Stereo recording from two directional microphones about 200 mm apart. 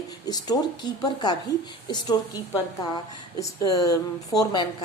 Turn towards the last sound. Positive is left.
turn(degrees=20)  # may be behind; listen again after turning